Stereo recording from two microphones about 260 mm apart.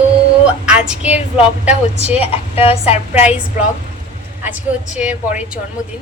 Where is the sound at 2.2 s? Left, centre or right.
Left.